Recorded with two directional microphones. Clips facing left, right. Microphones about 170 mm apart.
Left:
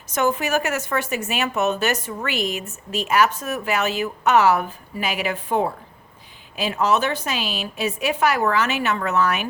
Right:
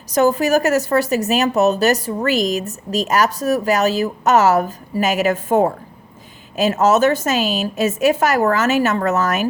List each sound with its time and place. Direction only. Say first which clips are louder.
0.1 s a woman's voice: right 6 dB; 35° right (ahead or behind)